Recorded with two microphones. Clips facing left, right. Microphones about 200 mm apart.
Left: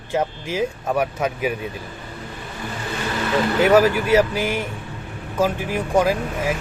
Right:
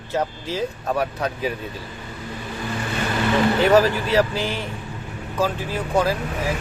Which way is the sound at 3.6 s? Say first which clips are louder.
Left 4 dB; 15° left (ahead or behind).